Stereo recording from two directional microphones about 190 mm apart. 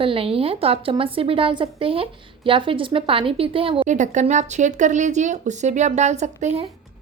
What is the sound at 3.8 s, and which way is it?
A woman's voice, 40° right (ahead or behind).